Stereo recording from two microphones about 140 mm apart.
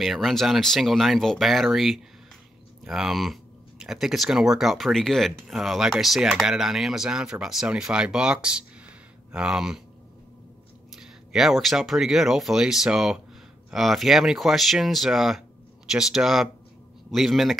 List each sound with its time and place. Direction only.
0.0 s speech: centre (ahead or behind)
11.0 s speech: centre (ahead or behind)